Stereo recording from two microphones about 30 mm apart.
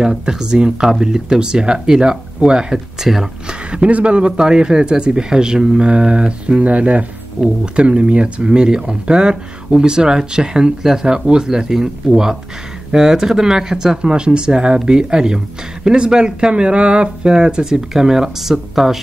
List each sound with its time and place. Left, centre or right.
0.0 s speech: right
3.0 s speech: centre
3.4 s speech: right
4.4 s speech: right
6.6 s speech: right
7.6 s speech: right; by 13.9 s centre
14.0 s speech: right
17.3 s speech: right; by 18.9 s centre